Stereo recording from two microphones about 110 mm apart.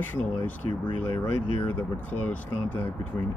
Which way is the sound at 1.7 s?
15° left (ahead or behind).